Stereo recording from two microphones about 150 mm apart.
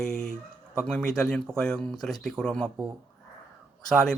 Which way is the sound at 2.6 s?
15° right (ahead or behind).